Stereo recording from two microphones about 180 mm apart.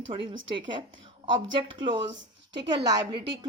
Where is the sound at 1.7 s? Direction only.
25° right (ahead or behind).